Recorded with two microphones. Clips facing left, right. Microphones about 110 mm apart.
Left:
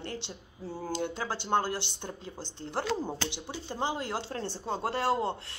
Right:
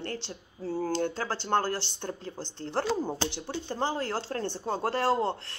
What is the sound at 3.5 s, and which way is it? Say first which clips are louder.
Speech: right 1 dB; 15° left (ahead or behind).